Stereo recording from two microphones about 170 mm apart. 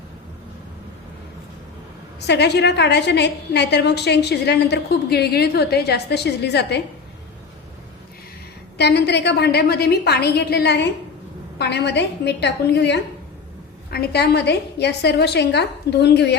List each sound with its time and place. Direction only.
2.2 s a woman's voice: 80° left
8.8 s a woman's voice: 75° left (ahead or behind)
13.9 s a woman's voice: 70° left (ahead or behind)